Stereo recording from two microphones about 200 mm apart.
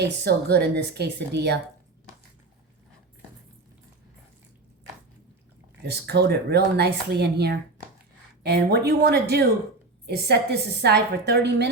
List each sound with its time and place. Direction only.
0.0 s speech: 55° right (ahead or behind)
5.8 s a woman's voice: 55° right (ahead or behind)